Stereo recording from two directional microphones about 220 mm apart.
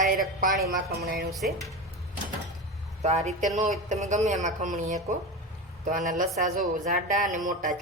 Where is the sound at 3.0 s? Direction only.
30° right (ahead or behind).